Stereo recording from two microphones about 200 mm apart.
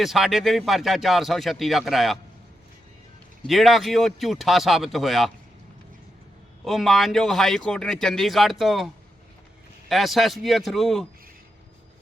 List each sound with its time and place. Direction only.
0.0 s a man's voice: centre (ahead or behind)
3.4 s a man's voice: centre (ahead or behind)
6.7 s a man's voice: centre (ahead or behind)
9.9 s a man's voice: centre (ahead or behind)